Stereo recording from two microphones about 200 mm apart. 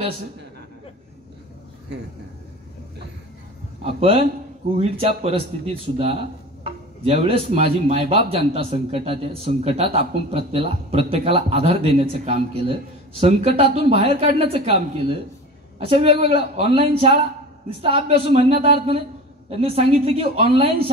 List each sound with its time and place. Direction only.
3.8 s speech: 30° right (ahead or behind)